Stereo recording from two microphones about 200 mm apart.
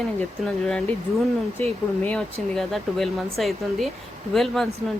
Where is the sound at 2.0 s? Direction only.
5° left (ahead or behind).